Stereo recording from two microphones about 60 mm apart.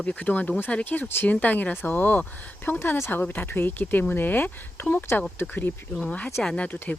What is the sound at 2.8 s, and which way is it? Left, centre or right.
Speech, left.